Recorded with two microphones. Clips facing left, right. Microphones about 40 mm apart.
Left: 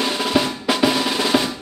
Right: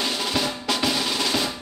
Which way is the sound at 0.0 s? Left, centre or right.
Left.